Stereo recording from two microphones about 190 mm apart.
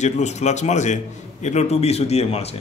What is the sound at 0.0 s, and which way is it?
A man's voice, 35° left (ahead or behind).